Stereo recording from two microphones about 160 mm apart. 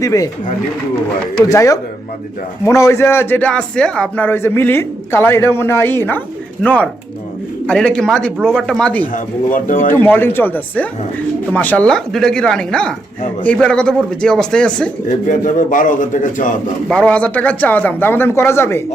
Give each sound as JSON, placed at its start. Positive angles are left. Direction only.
{"t": 0.0, "sound": "speech", "side_deg": 20}
{"t": 1.5, "sound": "a man's voice", "side_deg": 20}
{"t": 9.1, "sound": "a man's voice", "side_deg": 60}
{"t": 9.9, "sound": "a man's voice", "side_deg": 15}
{"t": 15.3, "sound": "a man's voice", "side_deg": 55}
{"t": 16.9, "sound": "a man's voice", "side_deg": 10}